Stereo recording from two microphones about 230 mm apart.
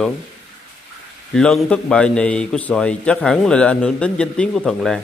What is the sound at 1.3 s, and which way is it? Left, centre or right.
A man's voice, centre.